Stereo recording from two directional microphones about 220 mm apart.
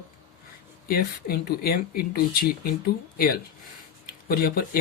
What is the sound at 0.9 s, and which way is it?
Speech, 45° left (ahead or behind).